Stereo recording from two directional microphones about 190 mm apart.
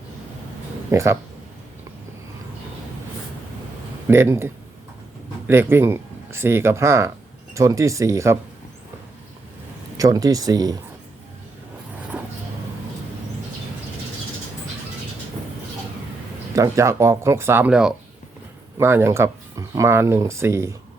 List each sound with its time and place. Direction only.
0.9 s speech: 15° right (ahead or behind)
4.1 s speech: 15° right (ahead or behind)
10.0 s speech: 20° right (ahead or behind)
12.1 s vehicle: 5° right (ahead or behind)
16.6 s speech: 15° right (ahead or behind)